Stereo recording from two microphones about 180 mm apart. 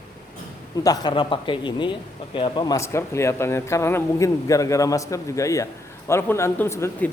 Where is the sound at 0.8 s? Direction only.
20° left (ahead or behind).